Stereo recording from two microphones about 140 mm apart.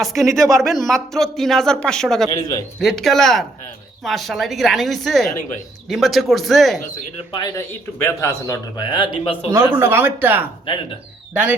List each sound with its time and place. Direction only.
0.0 s speech: centre (ahead or behind)
2.3 s speech: 25° left (ahead or behind)
2.8 s speech: centre (ahead or behind)
7.3 s speech: 30° left (ahead or behind)
7.9 s a man's voice: 20° left (ahead or behind); by 9.5 s 40° left (ahead or behind)
9.5 s speech: 15° right (ahead or behind)